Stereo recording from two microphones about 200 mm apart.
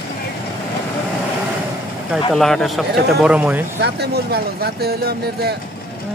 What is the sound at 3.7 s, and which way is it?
Speech, 50° right (ahead or behind).